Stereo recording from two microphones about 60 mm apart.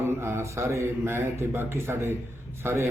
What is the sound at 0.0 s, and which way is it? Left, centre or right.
A man's voice, right.